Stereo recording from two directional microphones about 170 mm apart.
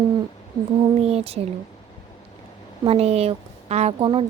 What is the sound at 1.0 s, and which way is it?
Speech, 35° right (ahead or behind).